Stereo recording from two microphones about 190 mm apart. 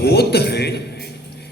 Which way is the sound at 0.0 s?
60° left (ahead or behind).